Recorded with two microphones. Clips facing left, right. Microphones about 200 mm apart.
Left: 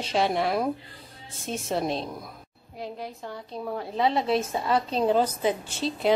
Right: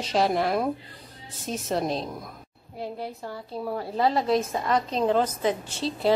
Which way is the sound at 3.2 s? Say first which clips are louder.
Right 1 dB; 5° right (ahead or behind).